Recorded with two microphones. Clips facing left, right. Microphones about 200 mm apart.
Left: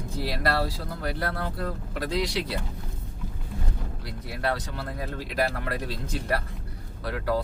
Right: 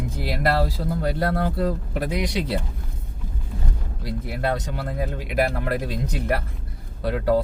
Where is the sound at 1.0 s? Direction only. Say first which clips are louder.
Right 6 dB; 25° right (ahead or behind).